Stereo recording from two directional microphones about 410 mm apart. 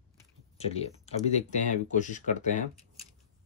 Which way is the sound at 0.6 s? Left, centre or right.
Centre.